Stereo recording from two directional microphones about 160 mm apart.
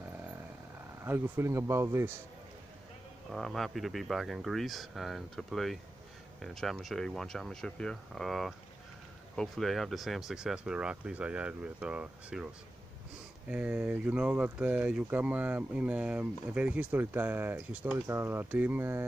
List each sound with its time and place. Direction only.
1.0 s speech: 15° right (ahead or behind)
3.3 s speech: centre (ahead or behind)
13.5 s speech: 10° right (ahead or behind)